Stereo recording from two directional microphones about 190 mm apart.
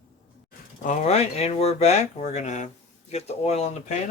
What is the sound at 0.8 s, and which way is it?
Speech, 35° left (ahead or behind).